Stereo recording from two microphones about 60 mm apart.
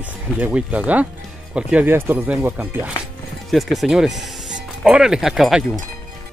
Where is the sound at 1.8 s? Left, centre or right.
Right.